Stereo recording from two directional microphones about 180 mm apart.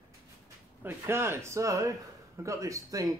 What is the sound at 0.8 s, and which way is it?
Speech, 15° right (ahead or behind).